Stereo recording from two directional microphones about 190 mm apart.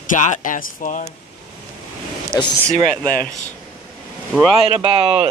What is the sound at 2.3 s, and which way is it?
Speech, 15° left (ahead or behind).